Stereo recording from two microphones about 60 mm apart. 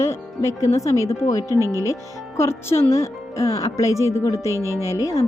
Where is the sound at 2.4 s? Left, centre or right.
Left.